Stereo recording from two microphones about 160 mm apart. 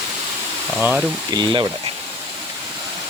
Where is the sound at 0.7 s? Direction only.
5° right (ahead or behind).